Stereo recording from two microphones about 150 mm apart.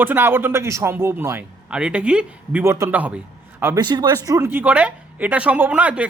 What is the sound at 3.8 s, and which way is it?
A man's voice, 30° right (ahead or behind).